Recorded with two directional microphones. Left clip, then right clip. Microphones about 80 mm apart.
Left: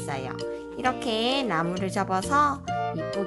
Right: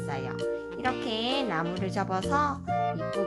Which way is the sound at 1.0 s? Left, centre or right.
Left.